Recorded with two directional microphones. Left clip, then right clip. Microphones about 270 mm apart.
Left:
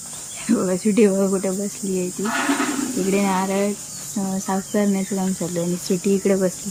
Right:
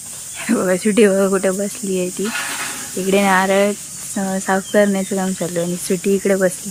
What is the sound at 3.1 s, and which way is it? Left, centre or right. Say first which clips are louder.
Speech: right 9 dB; centre.